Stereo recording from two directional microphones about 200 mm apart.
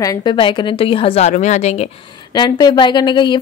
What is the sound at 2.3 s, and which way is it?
A woman's voice, 20° left (ahead or behind).